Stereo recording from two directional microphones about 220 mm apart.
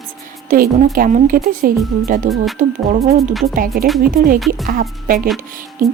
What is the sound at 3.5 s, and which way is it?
Speech, 40° right (ahead or behind).